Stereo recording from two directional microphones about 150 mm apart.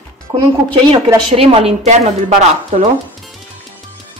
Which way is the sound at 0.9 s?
40° right (ahead or behind).